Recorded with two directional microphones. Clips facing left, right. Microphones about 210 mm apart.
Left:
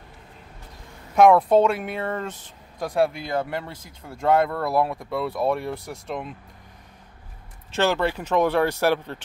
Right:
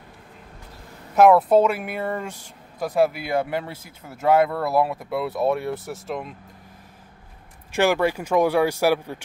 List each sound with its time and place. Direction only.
1.1 s speech: 5° right (ahead or behind)
7.7 s speech: 10° right (ahead or behind)